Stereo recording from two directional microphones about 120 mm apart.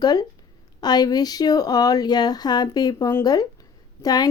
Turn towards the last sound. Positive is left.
turn(degrees=35)  # may be behind; listen again after turning